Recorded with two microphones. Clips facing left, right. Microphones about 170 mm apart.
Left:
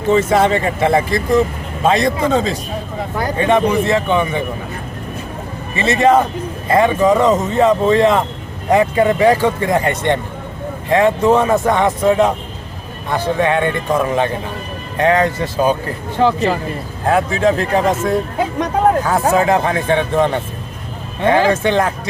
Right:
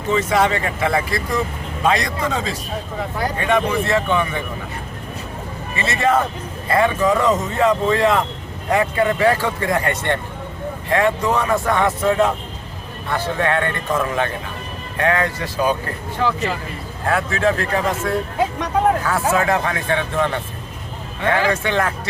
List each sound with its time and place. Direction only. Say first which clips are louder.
0.1 s speech: left 5 dB; 30° left (ahead or behind)
5.7 s speech: left 6 dB; 20° left (ahead or behind)
17.1 s speech: left 4 dB; 20° left (ahead or behind)